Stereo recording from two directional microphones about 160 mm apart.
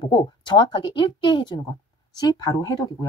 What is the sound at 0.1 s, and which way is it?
A woman's voice, 30° left (ahead or behind).